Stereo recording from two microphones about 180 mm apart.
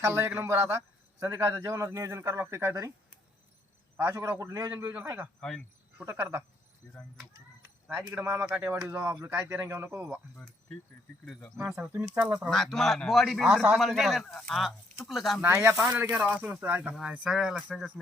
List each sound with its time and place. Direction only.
0.0 s speech: 15° right (ahead or behind)
3.9 s speech: 15° right (ahead or behind)
5.4 s a man's voice: 5° left (ahead or behind)
6.0 s speech: 10° right (ahead or behind)
7.9 s speech: 10° right (ahead or behind)
10.3 s a man's voice: centre (ahead or behind)
15.4 s a man's voice: 10° right (ahead or behind)